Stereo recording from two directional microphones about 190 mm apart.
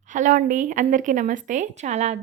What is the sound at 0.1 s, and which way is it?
A woman's voice, 40° right (ahead or behind).